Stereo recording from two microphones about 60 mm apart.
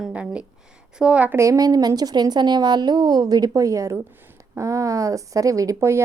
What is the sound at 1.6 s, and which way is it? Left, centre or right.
A woman's voice, right.